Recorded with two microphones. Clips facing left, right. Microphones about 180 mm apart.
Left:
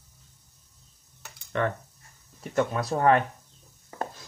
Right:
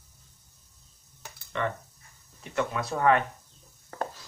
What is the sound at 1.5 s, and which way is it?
Speech, 50° left (ahead or behind).